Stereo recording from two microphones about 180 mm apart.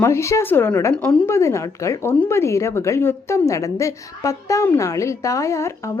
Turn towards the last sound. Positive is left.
turn(degrees=15)  # may be behind; listen again after turning